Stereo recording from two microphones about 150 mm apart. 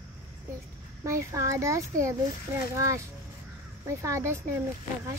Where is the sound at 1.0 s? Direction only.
20° right (ahead or behind).